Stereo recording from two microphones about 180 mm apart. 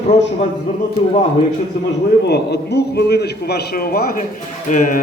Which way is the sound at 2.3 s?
65° left (ahead or behind).